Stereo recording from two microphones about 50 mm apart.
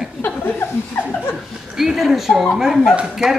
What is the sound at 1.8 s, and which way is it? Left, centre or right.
Speech, centre.